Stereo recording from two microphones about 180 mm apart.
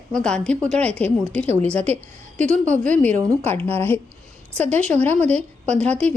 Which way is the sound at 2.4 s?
40° right (ahead or behind).